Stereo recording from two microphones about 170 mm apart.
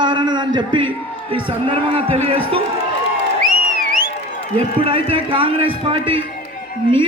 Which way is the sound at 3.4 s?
55° right (ahead or behind).